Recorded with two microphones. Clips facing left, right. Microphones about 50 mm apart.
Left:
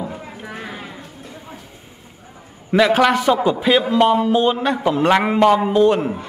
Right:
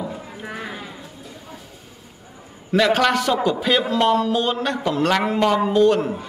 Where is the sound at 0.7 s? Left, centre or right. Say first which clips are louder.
Left 1 dB; centre.